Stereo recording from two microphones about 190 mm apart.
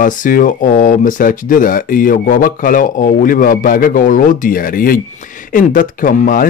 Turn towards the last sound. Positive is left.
turn(degrees=45)  # may be behind; listen again after turning